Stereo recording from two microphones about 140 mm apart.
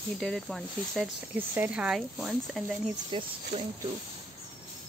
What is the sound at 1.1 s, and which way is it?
Speech, 15° right (ahead or behind).